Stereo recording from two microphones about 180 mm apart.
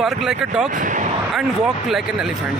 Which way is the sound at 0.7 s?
45° right (ahead or behind).